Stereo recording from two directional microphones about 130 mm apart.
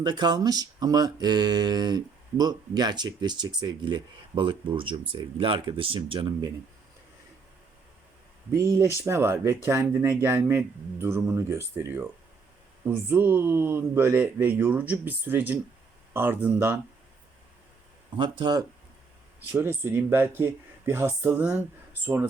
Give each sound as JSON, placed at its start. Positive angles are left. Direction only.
{"t": 0.0, "sound": "speech", "side_deg": -35}
{"t": 8.5, "sound": "speech", "side_deg": -25}
{"t": 18.2, "sound": "speech", "side_deg": -35}
{"t": 19.5, "sound": "speech", "side_deg": -15}